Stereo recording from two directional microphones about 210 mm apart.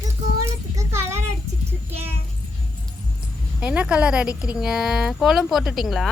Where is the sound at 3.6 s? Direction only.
5° right (ahead or behind).